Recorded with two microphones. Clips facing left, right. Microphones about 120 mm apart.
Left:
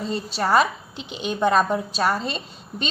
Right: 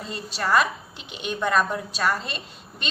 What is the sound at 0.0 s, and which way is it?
A woman's voice, 35° left (ahead or behind).